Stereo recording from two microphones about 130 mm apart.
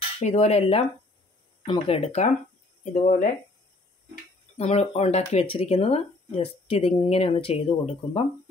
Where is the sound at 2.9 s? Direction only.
75° left (ahead or behind).